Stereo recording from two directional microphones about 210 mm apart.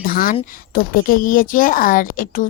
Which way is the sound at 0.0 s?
40° left (ahead or behind).